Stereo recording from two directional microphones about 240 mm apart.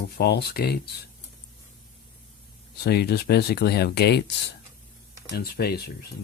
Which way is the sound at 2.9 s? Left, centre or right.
Left.